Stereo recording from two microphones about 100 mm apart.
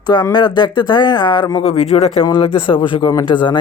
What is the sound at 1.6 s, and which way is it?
Speech, 90° left.